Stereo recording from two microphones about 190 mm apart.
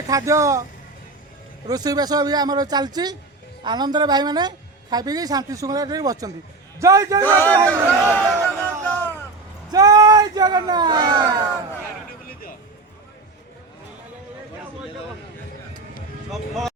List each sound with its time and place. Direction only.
0.1 s speech: 15° right (ahead or behind)
1.6 s a woman's voice: 20° right (ahead or behind)
7.3 s speech: 10° left (ahead or behind)
8.1 s music: 5° left (ahead or behind)
9.7 s speech: 20° right (ahead or behind)
16.3 s speech: centre (ahead or behind)